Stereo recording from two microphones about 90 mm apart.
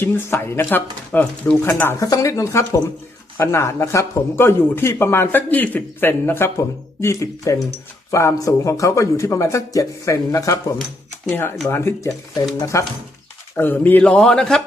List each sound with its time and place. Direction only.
0.0 s speech: 25° left (ahead or behind)
2.0 s a man's voice: 40° left (ahead or behind)
13.6 s speech: 20° left (ahead or behind)
14.2 s a man's voice: 5° left (ahead or behind)